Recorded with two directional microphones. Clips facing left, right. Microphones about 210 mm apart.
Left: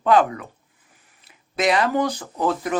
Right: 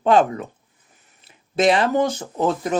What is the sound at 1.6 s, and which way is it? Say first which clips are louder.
Speech: right 3 dB; 30° right (ahead or behind).